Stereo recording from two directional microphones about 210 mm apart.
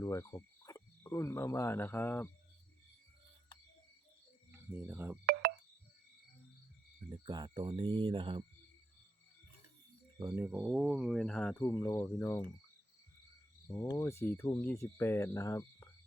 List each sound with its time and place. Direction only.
0.0 s speech: 15° left (ahead or behind)
4.5 s speech: 10° right (ahead or behind)
5.2 s a sound: 45° right (ahead or behind)
7.1 s speech: 20° right (ahead or behind)
10.2 s speech: 15° right (ahead or behind); by 12.4 s 15° left (ahead or behind)
13.7 s speech: 15° left (ahead or behind)